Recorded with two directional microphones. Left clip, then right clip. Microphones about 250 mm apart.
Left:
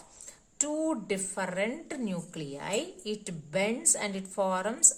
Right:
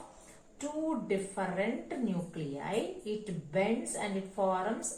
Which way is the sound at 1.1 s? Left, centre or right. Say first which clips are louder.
Left 1 dB; left.